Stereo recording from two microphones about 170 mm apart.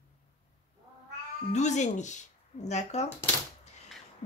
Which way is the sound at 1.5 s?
45° left (ahead or behind).